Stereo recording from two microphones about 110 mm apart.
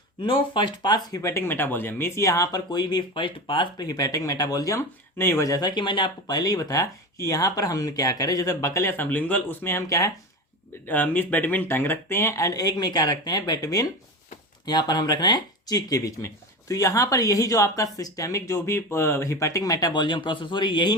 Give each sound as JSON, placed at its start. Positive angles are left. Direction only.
{"t": 0.2, "sound": "speech", "side_deg": 50}
{"t": 10.8, "sound": "speech", "side_deg": 15}